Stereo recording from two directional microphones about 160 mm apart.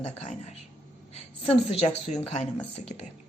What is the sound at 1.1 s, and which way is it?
A woman's voice, 40° left (ahead or behind).